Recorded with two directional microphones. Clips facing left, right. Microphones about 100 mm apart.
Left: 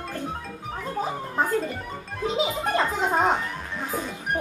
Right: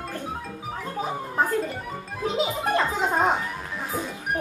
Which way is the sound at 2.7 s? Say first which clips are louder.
Even; centre (ahead or behind).